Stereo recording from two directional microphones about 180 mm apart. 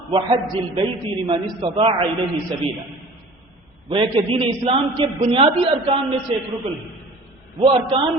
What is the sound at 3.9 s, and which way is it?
A man's voice, 30° right (ahead or behind).